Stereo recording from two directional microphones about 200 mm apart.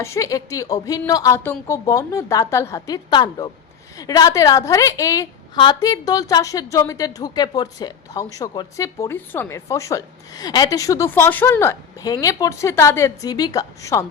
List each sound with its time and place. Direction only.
0.0 s a woman's voice: 15° left (ahead or behind)